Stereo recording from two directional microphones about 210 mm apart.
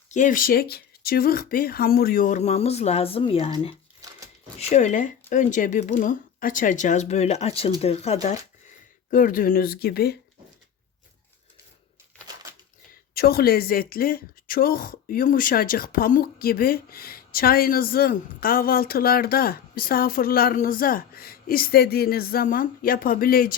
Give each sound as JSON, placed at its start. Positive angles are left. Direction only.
{"t": 0.1, "sound": "speech", "side_deg": 40}
{"t": 4.7, "sound": "a woman's voice", "side_deg": 35}
{"t": 13.1, "sound": "a woman's voice", "side_deg": 45}